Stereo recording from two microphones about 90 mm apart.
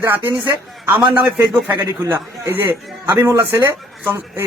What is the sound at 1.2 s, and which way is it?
Speech, 25° right (ahead or behind).